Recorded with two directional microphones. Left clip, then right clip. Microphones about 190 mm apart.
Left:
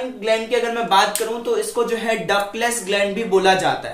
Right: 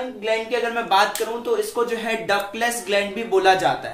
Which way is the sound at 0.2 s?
20° right (ahead or behind).